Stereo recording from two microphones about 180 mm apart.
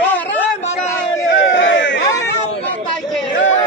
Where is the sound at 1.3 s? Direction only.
90° left.